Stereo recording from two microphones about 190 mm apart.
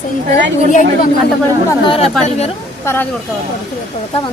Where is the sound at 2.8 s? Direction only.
10° left (ahead or behind).